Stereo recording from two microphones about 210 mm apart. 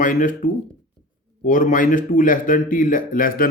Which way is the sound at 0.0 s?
40° left (ahead or behind).